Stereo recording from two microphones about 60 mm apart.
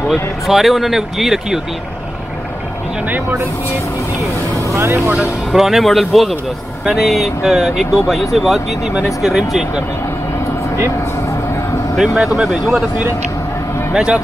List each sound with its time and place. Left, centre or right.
0.1 s speech: centre
4.6 s speech: right
5.1 s speech: centre
5.6 s speech: centre
12.0 s speech: centre
13.9 s speech: centre